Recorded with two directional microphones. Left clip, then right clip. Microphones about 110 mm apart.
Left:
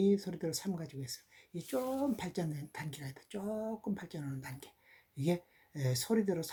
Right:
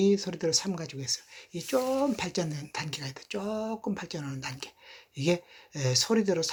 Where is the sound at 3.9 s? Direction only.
30° left (ahead or behind).